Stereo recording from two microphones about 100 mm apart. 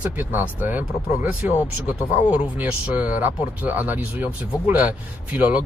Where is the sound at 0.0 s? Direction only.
15° right (ahead or behind).